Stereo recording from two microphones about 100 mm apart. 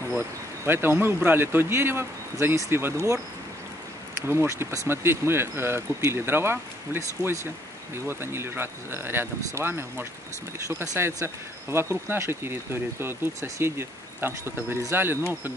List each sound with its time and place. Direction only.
0.7 s speech: 20° right (ahead or behind)